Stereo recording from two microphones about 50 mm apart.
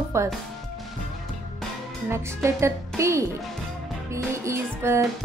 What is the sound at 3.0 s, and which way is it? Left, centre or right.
Speech, right.